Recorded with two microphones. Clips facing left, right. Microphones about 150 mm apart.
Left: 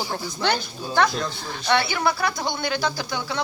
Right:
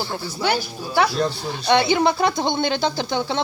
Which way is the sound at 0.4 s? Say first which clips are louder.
Right 2 dB; 10° right (ahead or behind).